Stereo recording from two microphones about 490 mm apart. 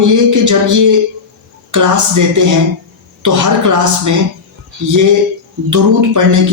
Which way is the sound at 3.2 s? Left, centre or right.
Right.